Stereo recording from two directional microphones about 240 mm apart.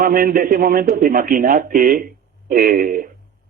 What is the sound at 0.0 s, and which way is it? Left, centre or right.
Speech, right.